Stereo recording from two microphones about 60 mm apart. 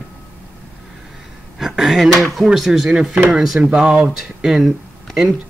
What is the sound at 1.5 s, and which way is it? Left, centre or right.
Speech, centre.